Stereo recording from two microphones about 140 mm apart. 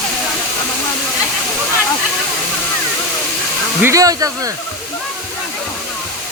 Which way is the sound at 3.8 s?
25° right (ahead or behind).